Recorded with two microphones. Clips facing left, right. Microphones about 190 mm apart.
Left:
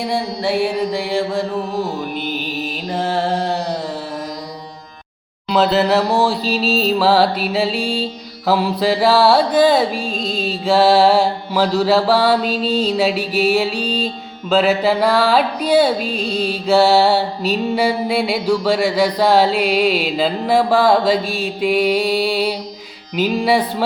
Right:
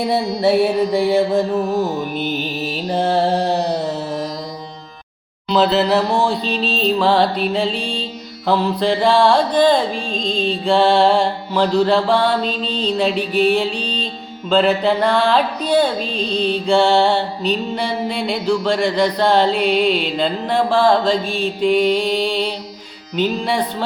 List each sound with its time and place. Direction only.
0.1 s music: 20° right (ahead or behind)
5.5 s music: centre (ahead or behind)